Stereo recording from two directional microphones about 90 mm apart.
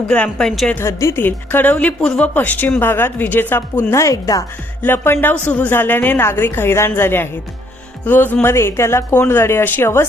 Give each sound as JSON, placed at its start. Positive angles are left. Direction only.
{"t": 0.1, "sound": "a woman's voice", "side_deg": 10}
{"t": 0.8, "sound": "speech", "side_deg": 30}
{"t": 4.8, "sound": "speech", "side_deg": 25}